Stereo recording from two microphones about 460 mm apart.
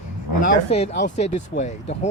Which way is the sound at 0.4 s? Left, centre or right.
Centre.